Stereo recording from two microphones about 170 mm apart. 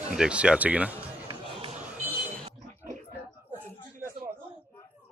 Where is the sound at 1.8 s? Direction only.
10° right (ahead or behind).